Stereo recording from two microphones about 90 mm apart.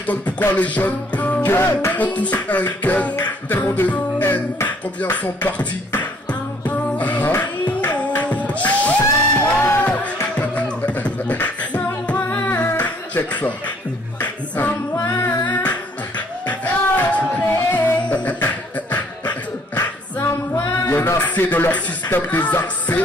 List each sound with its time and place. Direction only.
0.0 s music: 20° left (ahead or behind)
5.1 s music: 15° left (ahead or behind)
10.3 s beatboxing: 15° left (ahead or behind)
14.2 s a capella: 15° left (ahead or behind)
15.4 s music: 20° left (ahead or behind)